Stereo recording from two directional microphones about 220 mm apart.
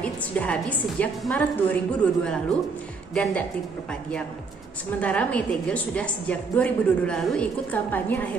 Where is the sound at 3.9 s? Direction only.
5° left (ahead or behind).